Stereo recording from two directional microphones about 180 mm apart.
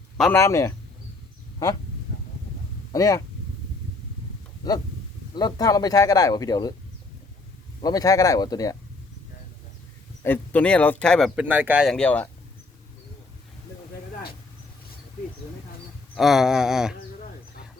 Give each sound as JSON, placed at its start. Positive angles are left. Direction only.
{"t": 0.2, "sound": "speech", "side_deg": 10}
{"t": 2.9, "sound": "speech", "side_deg": 20}
{"t": 4.6, "sound": "speech", "side_deg": 20}
{"t": 7.8, "sound": "speech", "side_deg": 20}
{"t": 10.2, "sound": "speech", "side_deg": 10}
{"t": 11.4, "sound": "speech", "side_deg": -10}
{"t": 16.1, "sound": "speech", "side_deg": 0}